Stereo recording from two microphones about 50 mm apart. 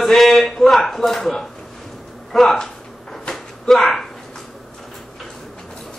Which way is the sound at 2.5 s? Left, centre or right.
Centre.